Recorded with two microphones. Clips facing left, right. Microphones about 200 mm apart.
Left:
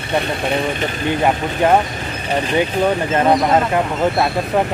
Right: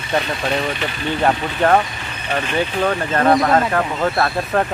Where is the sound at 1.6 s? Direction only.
15° left (ahead or behind).